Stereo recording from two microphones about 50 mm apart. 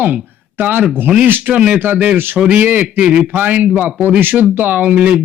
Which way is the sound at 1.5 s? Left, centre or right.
Right.